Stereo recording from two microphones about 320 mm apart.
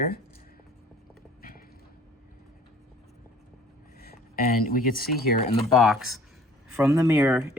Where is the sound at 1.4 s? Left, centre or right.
Left.